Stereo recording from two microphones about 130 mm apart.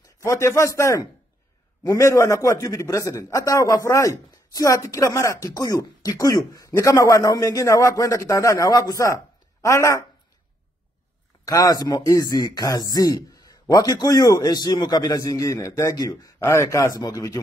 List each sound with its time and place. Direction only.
0.0 s a man's voice: 25° left (ahead or behind)
11.4 s a man's voice: 30° left (ahead or behind)